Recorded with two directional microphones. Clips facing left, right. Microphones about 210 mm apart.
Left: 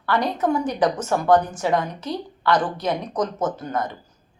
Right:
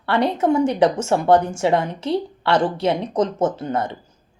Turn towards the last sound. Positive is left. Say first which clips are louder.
# right 3 dB
turn(degrees=-25)  # may be behind; listen again after turning